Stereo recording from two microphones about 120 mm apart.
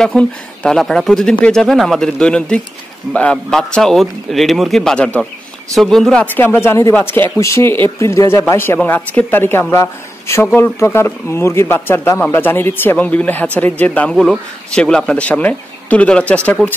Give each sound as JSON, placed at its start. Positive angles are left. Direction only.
{"t": 0.0, "sound": "a man's voice", "side_deg": 5}
{"t": 6.3, "sound": "speech", "side_deg": 15}